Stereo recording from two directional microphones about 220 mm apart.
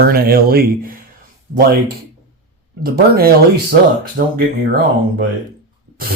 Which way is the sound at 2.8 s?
45° right (ahead or behind).